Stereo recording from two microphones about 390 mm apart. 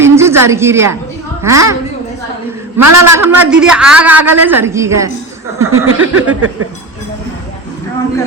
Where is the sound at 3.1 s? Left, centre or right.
Centre.